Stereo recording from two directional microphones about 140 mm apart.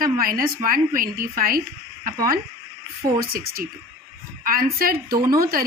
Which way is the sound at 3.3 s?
90° right.